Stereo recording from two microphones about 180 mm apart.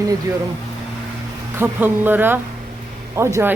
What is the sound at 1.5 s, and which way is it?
Speech, 10° right (ahead or behind).